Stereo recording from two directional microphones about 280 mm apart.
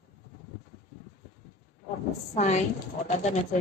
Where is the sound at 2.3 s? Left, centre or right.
Left.